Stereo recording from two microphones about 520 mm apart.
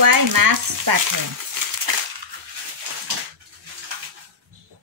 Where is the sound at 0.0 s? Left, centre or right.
Right.